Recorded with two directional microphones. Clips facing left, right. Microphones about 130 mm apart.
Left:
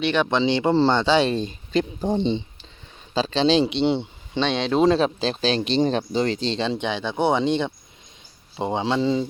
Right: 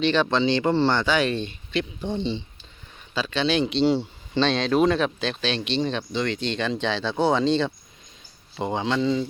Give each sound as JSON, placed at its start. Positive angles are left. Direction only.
{"t": 0.0, "sound": "speech", "side_deg": 15}
{"t": 3.7, "sound": "speech", "side_deg": 20}
{"t": 6.8, "sound": "speech", "side_deg": 15}